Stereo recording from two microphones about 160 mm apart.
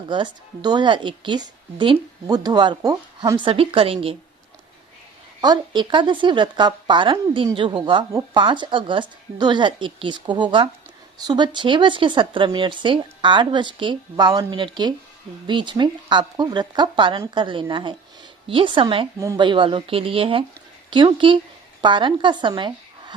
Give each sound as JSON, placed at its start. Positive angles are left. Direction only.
{"t": 0.1, "sound": "a woman's voice", "side_deg": -30}
{"t": 5.4, "sound": "a woman's voice", "side_deg": -25}